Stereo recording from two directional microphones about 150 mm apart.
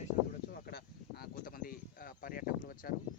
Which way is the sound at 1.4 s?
70° left (ahead or behind).